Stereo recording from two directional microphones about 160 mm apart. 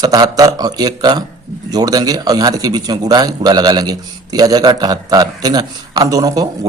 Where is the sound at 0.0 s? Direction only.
25° right (ahead or behind).